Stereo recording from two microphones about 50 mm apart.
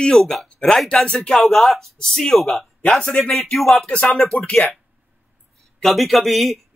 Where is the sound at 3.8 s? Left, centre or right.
Centre.